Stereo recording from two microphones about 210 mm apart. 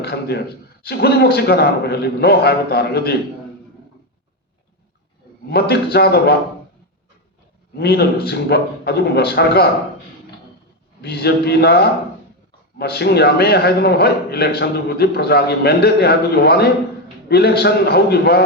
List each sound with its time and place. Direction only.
0.0 s a man's voice: 50° left (ahead or behind)
5.5 s a man's voice: 50° left (ahead or behind)
7.8 s a man's voice: 50° left (ahead or behind)
11.0 s a man's voice: 50° left (ahead or behind)